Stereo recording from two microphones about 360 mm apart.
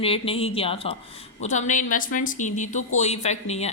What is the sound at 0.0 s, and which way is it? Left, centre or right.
A woman's voice, centre.